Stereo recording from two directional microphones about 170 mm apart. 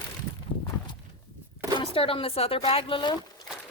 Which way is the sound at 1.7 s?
30° left (ahead or behind).